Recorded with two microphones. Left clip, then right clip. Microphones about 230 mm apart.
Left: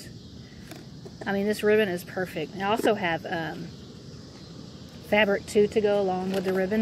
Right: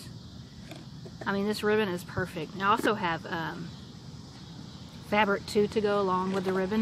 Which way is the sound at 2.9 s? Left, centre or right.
Right.